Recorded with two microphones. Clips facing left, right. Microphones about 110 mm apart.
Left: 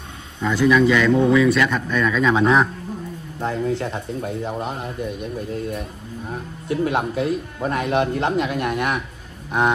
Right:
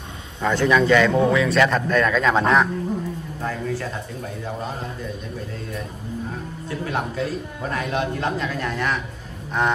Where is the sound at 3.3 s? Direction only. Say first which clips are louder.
Left 5 dB; 25° left (ahead or behind).